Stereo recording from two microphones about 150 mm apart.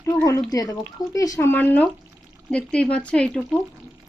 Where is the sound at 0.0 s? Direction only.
20° left (ahead or behind).